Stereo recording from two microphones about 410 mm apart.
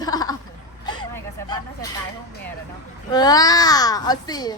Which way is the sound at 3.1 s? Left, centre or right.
Centre.